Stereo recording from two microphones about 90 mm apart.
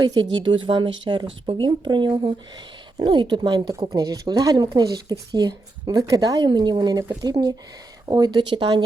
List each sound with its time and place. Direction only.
0.0 s speech: 60° right (ahead or behind)
3.8 s speech: 40° right (ahead or behind); by 8.8 s 60° right (ahead or behind)